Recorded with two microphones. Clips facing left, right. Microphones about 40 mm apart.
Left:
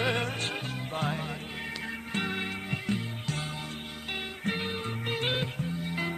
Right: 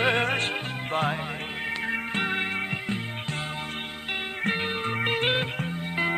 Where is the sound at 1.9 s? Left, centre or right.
Right.